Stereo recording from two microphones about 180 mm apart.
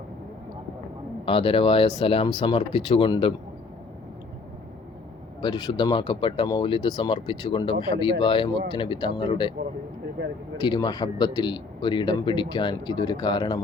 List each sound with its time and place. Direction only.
1.2 s a man's voice: 30° left (ahead or behind)
5.4 s a man's voice: 25° left (ahead or behind)
10.6 s a man's voice: 25° left (ahead or behind)